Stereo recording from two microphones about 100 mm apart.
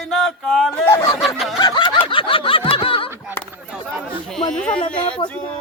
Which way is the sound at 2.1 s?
60° left (ahead or behind).